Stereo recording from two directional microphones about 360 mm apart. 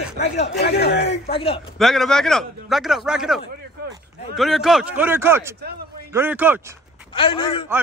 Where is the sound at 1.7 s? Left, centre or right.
Centre.